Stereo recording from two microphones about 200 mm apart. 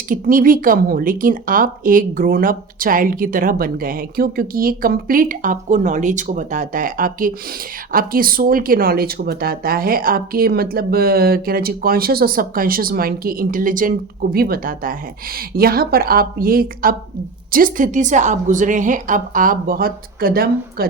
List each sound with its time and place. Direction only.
0.1 s a woman's voice: 45° right (ahead or behind)